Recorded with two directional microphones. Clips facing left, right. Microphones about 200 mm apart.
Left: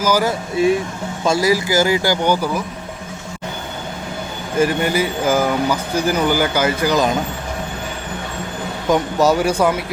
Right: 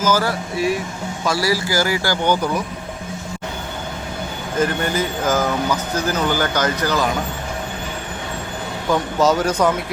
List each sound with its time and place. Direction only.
0.0 s speech: 15° left (ahead or behind)
4.5 s speech: 10° left (ahead or behind)
8.9 s speech: 15° left (ahead or behind)